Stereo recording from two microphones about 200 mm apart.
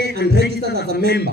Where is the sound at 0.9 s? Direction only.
50° right (ahead or behind).